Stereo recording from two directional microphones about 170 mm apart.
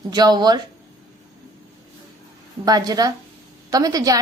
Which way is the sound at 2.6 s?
20° right (ahead or behind).